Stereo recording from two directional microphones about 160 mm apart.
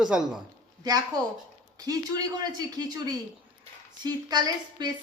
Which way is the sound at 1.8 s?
25° right (ahead or behind).